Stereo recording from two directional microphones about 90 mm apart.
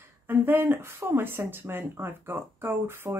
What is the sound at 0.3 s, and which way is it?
Speech, 25° right (ahead or behind).